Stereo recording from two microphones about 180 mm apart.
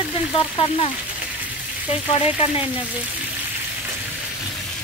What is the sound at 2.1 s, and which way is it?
Speech, 30° left (ahead or behind).